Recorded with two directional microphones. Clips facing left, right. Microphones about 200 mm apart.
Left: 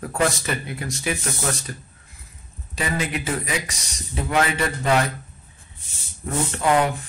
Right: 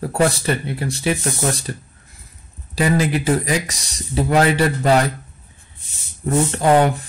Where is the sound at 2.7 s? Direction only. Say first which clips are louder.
Right 8 dB; 35° right (ahead or behind).